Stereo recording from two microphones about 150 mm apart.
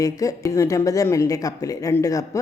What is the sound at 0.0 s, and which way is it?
A woman's voice, 25° left (ahead or behind).